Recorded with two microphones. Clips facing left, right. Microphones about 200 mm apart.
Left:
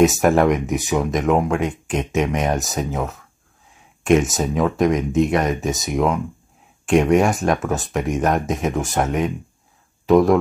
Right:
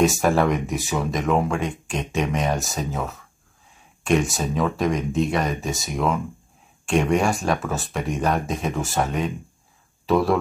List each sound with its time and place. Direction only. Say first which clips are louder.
0.0 s speech: left 4 dB; 20° left (ahead or behind)